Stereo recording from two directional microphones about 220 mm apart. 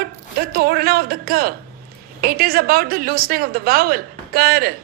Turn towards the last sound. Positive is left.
turn(degrees=-45)  # may be behind; listen again after turning